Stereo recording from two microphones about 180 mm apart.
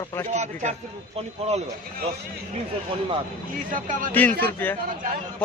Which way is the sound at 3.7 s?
50° right (ahead or behind).